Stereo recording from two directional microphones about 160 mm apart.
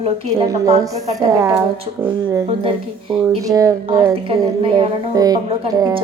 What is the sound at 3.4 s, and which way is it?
Speech, 20° right (ahead or behind).